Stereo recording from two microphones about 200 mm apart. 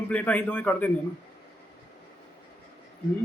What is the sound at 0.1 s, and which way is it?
Speech, 5° left (ahead or behind).